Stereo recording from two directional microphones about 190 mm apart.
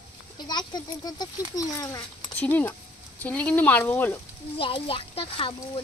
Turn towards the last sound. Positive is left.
turn(degrees=30)  # may be behind; listen again after turning